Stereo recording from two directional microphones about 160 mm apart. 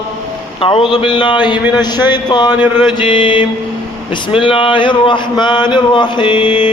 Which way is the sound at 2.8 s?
30° left (ahead or behind).